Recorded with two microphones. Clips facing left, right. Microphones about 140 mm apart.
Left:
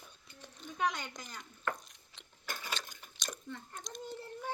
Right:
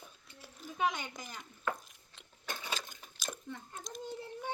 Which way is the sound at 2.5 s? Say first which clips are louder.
Right 1 dB; 15° right (ahead or behind).